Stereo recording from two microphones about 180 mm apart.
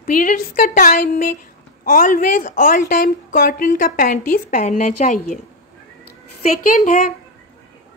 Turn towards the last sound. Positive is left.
turn(degrees=45)  # may be behind; listen again after turning